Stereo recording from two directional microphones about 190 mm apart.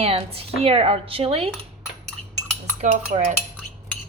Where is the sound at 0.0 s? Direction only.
30° right (ahead or behind).